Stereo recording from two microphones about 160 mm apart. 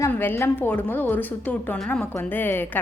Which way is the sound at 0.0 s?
10° left (ahead or behind).